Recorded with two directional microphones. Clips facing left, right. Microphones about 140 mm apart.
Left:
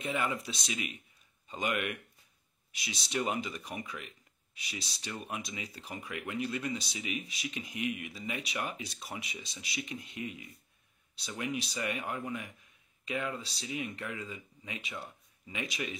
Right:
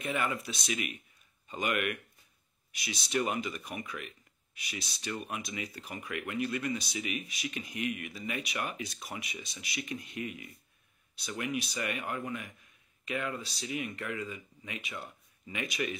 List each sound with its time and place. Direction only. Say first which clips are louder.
0.0 s speech: right 1 dB; 15° left (ahead or behind)
0.7 s speech: right 5 dB; 25° left (ahead or behind)